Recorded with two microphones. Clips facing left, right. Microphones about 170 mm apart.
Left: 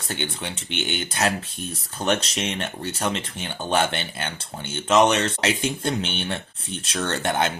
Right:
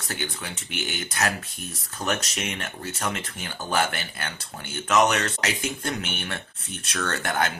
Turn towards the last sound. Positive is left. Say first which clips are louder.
# left 3 dB
turn(degrees=25)  # may be behind; listen again after turning